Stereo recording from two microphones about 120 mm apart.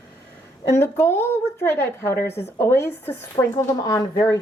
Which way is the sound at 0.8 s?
20° left (ahead or behind).